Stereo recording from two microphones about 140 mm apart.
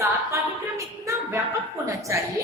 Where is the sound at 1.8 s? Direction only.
20° right (ahead or behind).